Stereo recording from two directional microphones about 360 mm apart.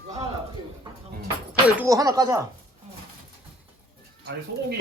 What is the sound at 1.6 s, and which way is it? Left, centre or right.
Speech, centre.